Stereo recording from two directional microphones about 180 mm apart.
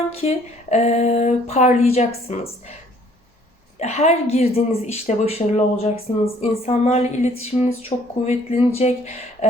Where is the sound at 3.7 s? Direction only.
40° left (ahead or behind).